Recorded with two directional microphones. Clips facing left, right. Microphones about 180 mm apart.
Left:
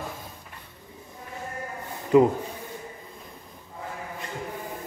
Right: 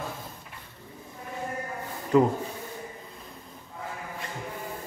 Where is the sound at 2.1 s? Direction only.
15° left (ahead or behind).